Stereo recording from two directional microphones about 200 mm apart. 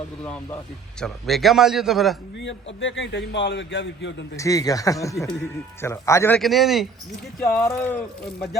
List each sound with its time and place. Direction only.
0.9 s a man's voice: centre (ahead or behind)
2.8 s a man's voice: 65° left (ahead or behind)
4.4 s a man's voice: 15° left (ahead or behind); by 6.8 s centre (ahead or behind)
7.4 s a man's voice: 10° left (ahead or behind)